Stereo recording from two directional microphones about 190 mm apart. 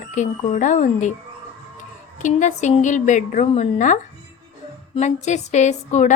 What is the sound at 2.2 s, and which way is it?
Speech, 40° left (ahead or behind).